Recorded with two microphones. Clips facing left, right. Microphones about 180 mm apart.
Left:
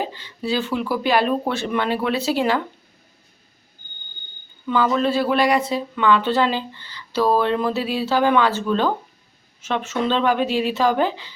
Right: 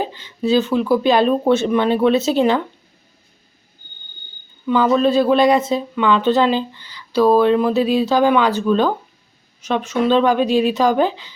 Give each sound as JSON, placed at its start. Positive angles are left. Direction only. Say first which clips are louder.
{"t": 0.0, "sound": "speech", "louder": "right 5 dB", "side_deg": -20}
{"t": 4.6, "sound": "speech", "louder": "right 4 dB", "side_deg": -15}